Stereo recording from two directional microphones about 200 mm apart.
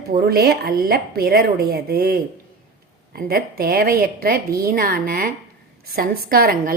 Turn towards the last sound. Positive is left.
turn(degrees=-50)  # may be behind; listen again after turning